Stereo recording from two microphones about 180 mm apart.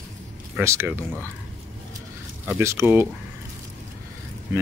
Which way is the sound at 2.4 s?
10° right (ahead or behind).